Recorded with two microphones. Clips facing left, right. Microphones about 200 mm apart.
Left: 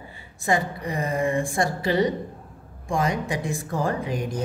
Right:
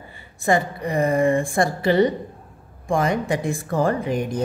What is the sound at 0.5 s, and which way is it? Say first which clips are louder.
Speech: right 4 dB; 55° right (ahead or behind).